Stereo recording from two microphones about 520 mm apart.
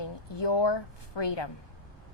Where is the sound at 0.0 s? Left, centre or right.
Left.